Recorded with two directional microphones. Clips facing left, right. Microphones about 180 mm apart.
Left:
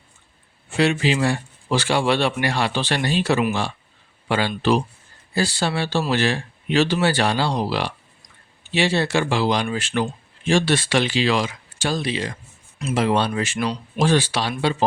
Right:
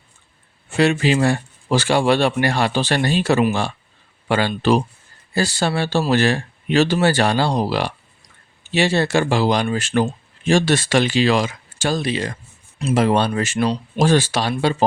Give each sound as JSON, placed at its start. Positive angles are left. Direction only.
{"t": 0.8, "sound": "speech", "side_deg": -45}